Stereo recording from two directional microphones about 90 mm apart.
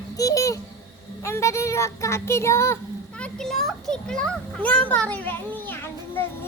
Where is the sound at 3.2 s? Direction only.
5° left (ahead or behind); by 6.2 s 25° left (ahead or behind).